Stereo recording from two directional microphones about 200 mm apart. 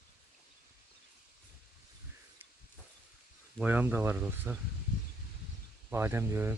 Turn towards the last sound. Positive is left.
turn(degrees=-10)  # may be behind; listen again after turning